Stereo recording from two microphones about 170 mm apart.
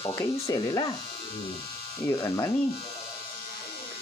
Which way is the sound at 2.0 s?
20° left (ahead or behind).